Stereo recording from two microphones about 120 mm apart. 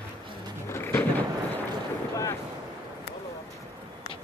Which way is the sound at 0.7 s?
20° left (ahead or behind).